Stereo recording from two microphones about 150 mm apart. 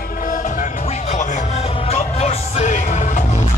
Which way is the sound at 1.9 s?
50° left (ahead or behind).